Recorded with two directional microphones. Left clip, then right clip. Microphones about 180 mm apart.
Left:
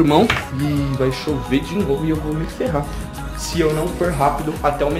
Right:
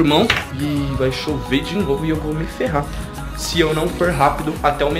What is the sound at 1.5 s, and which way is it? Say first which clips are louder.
Speech: right 1 dB; centre (ahead or behind).